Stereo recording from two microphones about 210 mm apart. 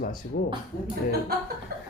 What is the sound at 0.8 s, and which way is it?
Speech, 50° right (ahead or behind).